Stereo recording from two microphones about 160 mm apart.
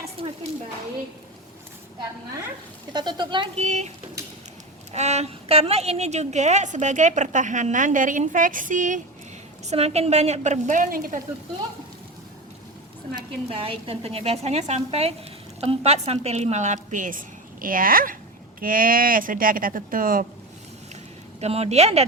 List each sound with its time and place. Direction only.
0.2 s a sound: 35° right (ahead or behind)
2.9 s a woman's voice: 25° right (ahead or behind); by 3.9 s 45° right (ahead or behind)
4.9 s a woman's voice: 40° right (ahead or behind)
9.6 s a woman's voice: 40° right (ahead or behind); by 11.2 s 55° right (ahead or behind)
13.1 s a woman's voice: 35° right (ahead or behind); by 20.2 s 60° right (ahead or behind)
21.4 s a woman's voice: 40° right (ahead or behind)